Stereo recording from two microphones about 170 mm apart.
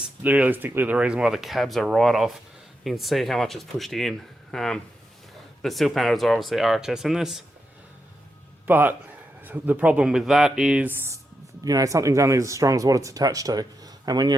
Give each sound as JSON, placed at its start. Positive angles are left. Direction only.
{"t": 0.0, "sound": "speech", "side_deg": -10}
{"t": 8.6, "sound": "speech", "side_deg": -10}